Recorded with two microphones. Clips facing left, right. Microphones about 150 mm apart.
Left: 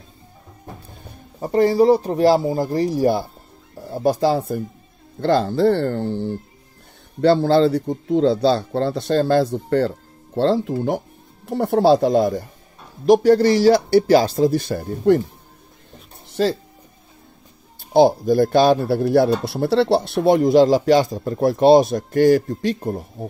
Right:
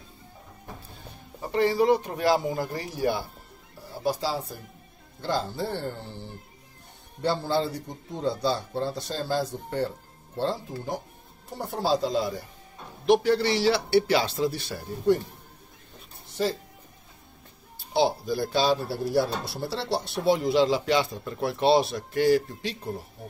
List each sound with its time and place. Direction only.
1.4 s speech: 40° left (ahead or behind)
3.9 s speech: 50° left (ahead or behind)
5.2 s speech: 70° left (ahead or behind); by 14.9 s 45° left (ahead or behind)
16.4 s speech: 90° left
17.7 s speech: 50° left (ahead or behind)